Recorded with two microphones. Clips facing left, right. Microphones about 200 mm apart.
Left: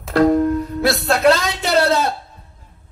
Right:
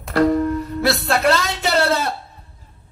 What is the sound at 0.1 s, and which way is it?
Music, 55° left (ahead or behind).